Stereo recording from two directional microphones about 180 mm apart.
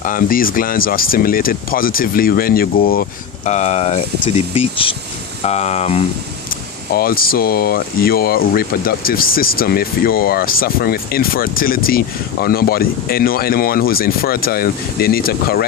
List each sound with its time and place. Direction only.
0.0 s speech: 50° left (ahead or behind)
3.4 s speech: 40° left (ahead or behind)
6.9 s speech: 55° left (ahead or behind)